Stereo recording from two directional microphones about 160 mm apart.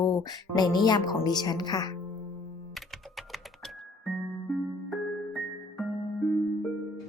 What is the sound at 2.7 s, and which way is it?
Computer keyboard, centre (ahead or behind).